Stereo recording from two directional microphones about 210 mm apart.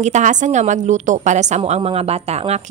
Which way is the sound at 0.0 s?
35° right (ahead or behind).